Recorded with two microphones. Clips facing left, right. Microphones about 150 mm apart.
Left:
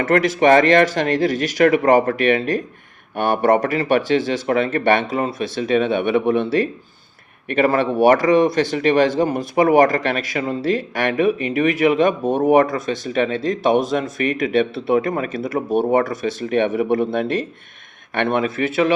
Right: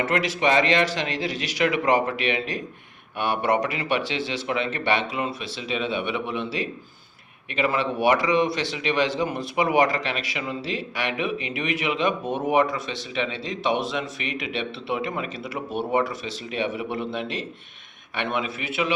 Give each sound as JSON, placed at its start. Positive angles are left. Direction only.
{"t": 0.0, "sound": "speech", "side_deg": 50}